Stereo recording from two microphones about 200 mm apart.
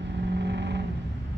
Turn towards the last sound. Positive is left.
turn(degrees=-60)  # may be behind; listen again after turning